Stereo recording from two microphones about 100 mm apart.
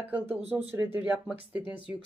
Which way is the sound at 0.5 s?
20° right (ahead or behind).